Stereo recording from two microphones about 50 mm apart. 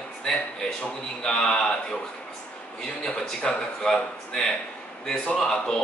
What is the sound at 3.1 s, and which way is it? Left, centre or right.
Speech, centre.